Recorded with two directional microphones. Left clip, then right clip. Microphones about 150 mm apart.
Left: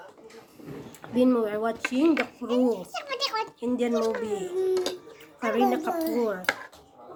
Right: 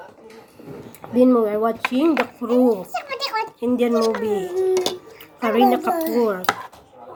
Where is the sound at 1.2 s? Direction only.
20° right (ahead or behind).